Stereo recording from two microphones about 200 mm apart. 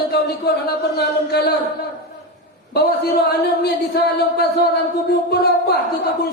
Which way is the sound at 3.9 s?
55° left (ahead or behind).